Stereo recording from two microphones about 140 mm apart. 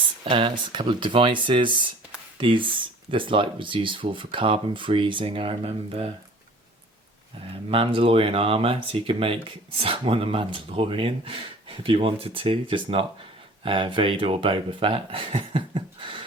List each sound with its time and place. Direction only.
0.3 s speech: 35° right (ahead or behind)
7.5 s speech: 40° right (ahead or behind)